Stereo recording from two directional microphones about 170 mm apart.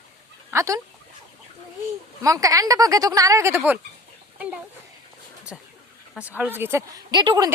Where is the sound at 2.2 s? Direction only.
20° right (ahead or behind).